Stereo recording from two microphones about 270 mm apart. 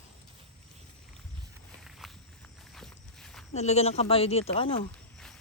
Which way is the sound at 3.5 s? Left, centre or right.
Left.